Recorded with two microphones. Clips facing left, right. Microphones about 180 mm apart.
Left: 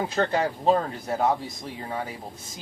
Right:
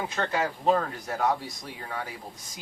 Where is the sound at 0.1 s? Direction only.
35° left (ahead or behind).